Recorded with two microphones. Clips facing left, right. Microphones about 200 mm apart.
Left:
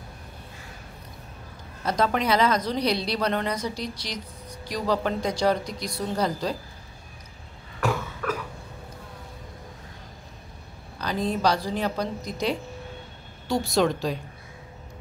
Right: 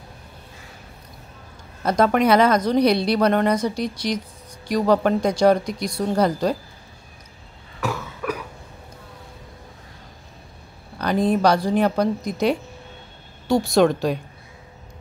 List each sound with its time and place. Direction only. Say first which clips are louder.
1.9 s a woman's voice: right 6 dB; 55° right (ahead or behind)
11.0 s a woman's voice: right 7 dB; 55° right (ahead or behind)